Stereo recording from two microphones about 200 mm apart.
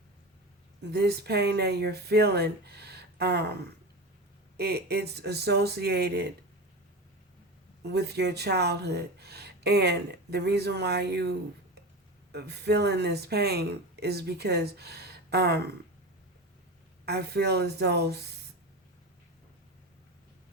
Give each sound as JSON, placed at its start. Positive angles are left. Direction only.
{"t": 0.9, "sound": "speech", "side_deg": -55}
{"t": 4.5, "sound": "speech", "side_deg": -55}
{"t": 7.9, "sound": "speech", "side_deg": -55}
{"t": 17.1, "sound": "speech", "side_deg": -55}